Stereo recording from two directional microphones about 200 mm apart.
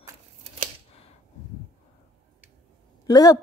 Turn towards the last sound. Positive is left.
turn(degrees=20)  # may be behind; listen again after turning